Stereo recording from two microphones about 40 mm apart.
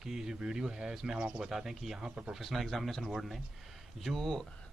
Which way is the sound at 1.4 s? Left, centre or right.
Centre.